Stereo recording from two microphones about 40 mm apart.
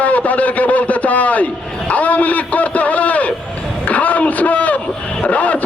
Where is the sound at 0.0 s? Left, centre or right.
Left.